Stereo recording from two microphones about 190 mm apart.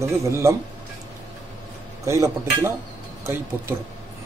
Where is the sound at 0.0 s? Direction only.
15° right (ahead or behind).